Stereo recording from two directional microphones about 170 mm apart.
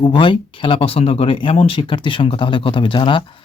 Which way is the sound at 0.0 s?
30° left (ahead or behind).